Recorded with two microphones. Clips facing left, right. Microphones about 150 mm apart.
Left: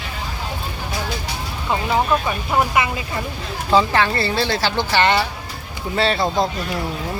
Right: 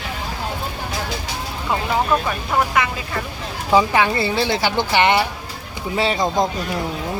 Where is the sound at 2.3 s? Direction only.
10° left (ahead or behind).